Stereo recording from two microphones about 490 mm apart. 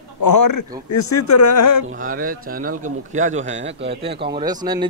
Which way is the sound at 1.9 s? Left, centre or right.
Centre.